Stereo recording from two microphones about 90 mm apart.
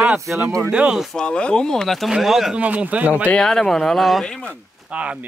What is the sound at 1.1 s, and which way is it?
A man's voice, 10° left (ahead or behind).